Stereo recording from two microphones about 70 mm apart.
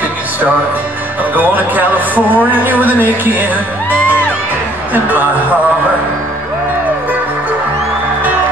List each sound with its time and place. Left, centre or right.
1.3 s speech: right